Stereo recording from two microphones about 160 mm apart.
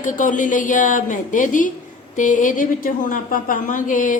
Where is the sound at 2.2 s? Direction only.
55° left (ahead or behind).